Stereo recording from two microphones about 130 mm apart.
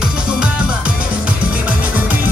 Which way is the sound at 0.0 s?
5° right (ahead or behind).